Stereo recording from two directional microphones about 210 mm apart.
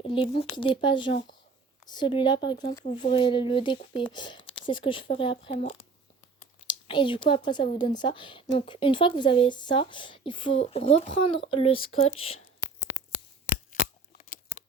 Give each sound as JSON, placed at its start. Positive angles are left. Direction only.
{"t": 0.0, "sound": "speech", "side_deg": 25}
{"t": 13.5, "sound": "scissors", "side_deg": 40}